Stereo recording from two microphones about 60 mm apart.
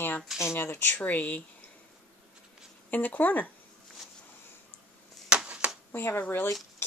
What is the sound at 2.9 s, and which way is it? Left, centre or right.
Speech, left.